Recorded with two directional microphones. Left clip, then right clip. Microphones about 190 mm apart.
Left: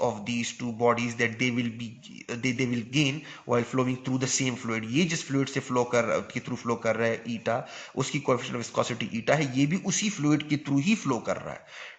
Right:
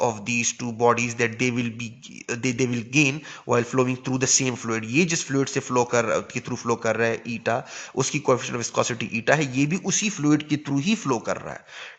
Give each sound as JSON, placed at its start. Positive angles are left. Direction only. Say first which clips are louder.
{"t": 0.0, "sound": "speech", "louder": "right 5 dB", "side_deg": -35}